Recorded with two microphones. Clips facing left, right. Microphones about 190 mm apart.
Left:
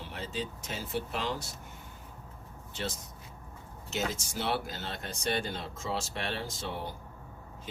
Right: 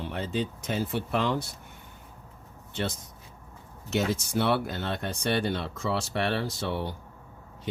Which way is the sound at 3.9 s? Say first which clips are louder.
Right 7 dB; 60° right (ahead or behind).